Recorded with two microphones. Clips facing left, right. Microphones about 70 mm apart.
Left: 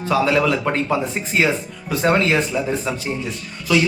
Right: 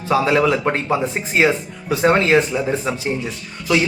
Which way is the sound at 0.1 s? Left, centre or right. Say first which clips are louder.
Right 2 dB; right.